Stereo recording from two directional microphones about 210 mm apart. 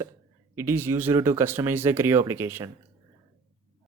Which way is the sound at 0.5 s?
10° right (ahead or behind).